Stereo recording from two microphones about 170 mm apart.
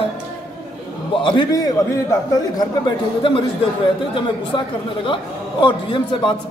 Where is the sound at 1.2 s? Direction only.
25° left (ahead or behind).